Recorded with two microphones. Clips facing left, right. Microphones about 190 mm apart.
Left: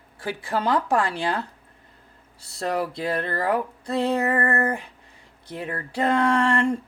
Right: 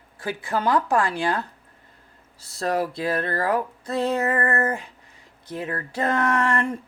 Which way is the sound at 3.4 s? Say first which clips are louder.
Even; 30° left (ahead or behind).